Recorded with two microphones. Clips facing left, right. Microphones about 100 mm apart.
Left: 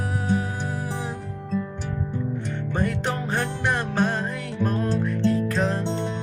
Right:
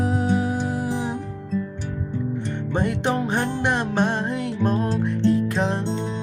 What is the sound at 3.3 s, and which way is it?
Music, 20° right (ahead or behind).